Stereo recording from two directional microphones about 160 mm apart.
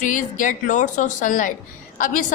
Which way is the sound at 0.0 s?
55° left (ahead or behind).